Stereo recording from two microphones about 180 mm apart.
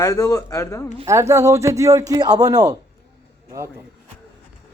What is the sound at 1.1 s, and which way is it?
A man's voice, 15° right (ahead or behind).